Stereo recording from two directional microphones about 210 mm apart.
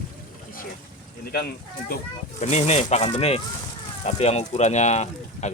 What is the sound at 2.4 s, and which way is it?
Speech, 30° left (ahead or behind).